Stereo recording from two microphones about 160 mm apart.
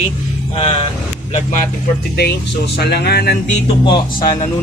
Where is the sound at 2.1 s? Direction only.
90° left.